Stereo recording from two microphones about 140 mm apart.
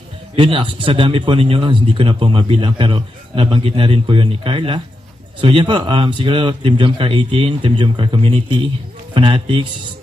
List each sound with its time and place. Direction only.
0.3 s a man's voice: 35° right (ahead or behind)